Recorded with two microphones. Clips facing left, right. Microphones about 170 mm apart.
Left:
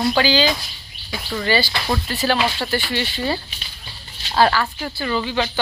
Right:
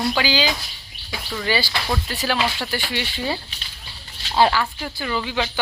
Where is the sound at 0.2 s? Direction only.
10° right (ahead or behind).